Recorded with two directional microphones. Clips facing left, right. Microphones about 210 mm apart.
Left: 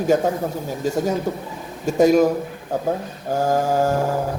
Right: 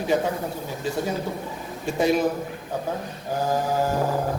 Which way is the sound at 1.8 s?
45° left (ahead or behind).